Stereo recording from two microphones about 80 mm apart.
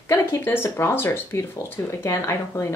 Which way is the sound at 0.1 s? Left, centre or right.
Left.